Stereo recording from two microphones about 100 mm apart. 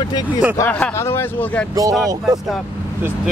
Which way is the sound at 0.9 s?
25° left (ahead or behind).